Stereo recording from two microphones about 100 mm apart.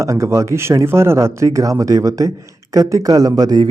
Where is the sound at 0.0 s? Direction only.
30° right (ahead or behind).